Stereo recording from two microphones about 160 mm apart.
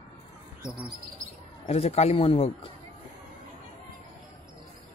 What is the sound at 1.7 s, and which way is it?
A man's voice, 40° left (ahead or behind).